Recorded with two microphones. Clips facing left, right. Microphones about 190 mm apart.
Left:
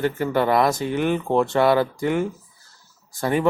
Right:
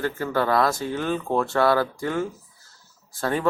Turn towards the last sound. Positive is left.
turn(degrees=15)  # may be behind; listen again after turning